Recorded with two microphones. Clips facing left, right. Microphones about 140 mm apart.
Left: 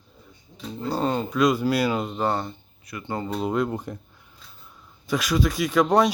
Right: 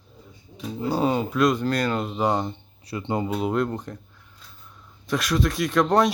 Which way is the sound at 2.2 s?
15° right (ahead or behind).